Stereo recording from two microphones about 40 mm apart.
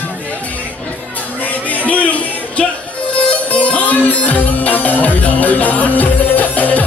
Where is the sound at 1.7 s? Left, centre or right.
Left.